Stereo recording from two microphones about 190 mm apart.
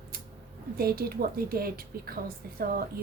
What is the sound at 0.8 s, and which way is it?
A woman's voice, 55° right (ahead or behind).